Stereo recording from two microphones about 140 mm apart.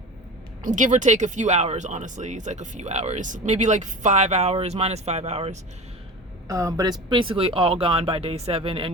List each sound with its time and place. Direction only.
0.8 s speech: 65° right (ahead or behind)
6.5 s speech: 25° right (ahead or behind); by 8.9 s 40° right (ahead or behind)